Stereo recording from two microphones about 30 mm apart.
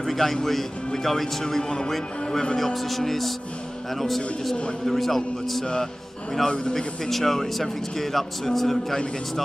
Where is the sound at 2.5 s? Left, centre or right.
Centre.